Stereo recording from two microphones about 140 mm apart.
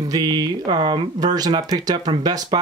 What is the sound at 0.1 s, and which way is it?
Speech, 30° right (ahead or behind).